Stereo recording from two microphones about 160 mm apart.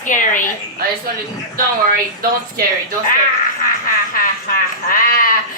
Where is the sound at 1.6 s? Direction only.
65° right (ahead or behind).